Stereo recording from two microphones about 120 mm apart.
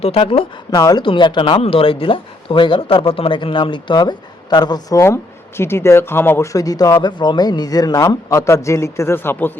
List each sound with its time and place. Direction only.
0.0 s speech: 50° left (ahead or behind)
0.8 s speech: 30° left (ahead or behind)
1.0 s speech: 40° left (ahead or behind); by 9.5 s 15° left (ahead or behind)